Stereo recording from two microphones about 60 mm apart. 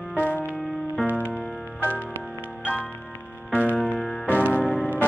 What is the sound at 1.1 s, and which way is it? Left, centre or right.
Music, left.